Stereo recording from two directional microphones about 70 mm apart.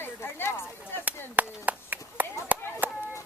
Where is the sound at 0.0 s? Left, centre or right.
Left.